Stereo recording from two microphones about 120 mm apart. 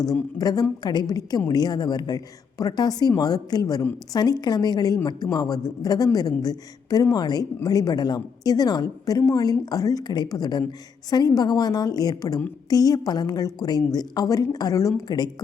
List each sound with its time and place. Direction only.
0.1 s speech: 30° left (ahead or behind)